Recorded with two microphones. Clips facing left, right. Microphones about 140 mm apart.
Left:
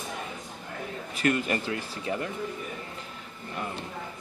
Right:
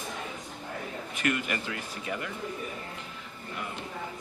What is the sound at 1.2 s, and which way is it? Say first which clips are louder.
Speech: left 4 dB; 35° left (ahead or behind).